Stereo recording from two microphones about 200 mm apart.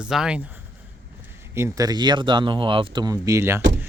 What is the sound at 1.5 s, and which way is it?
Speech, 15° right (ahead or behind).